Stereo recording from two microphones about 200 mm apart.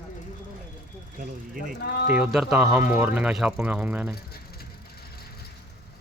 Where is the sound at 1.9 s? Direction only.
50° left (ahead or behind).